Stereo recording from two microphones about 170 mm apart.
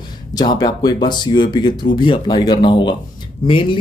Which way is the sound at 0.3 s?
25° left (ahead or behind).